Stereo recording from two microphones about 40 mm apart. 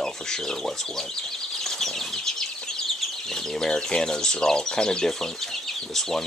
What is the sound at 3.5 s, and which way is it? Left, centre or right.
Speech, centre.